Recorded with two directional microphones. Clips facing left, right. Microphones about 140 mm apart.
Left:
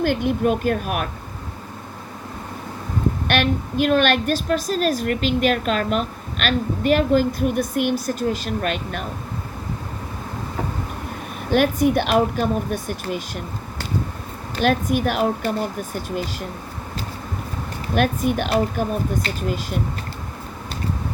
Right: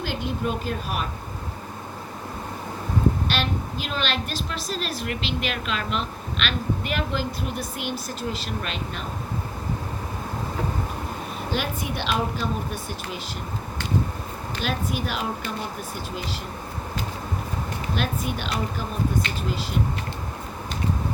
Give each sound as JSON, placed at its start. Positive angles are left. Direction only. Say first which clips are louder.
{"t": 0.0, "sound": "a woman's voice", "louder": "left 8 dB", "side_deg": 55}
{"t": 3.2, "sound": "a woman's voice", "louder": "left 6 dB", "side_deg": 55}
{"t": 11.5, "sound": "a woman's voice", "louder": "left 13 dB", "side_deg": 50}
{"t": 14.5, "sound": "a woman's voice", "louder": "left 9 dB", "side_deg": 50}
{"t": 17.9, "sound": "a woman's voice", "louder": "left 10 dB", "side_deg": 50}